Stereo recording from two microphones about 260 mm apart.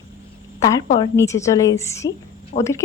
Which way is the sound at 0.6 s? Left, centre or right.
Centre.